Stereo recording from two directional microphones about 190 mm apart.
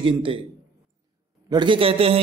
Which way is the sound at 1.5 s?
25° right (ahead or behind).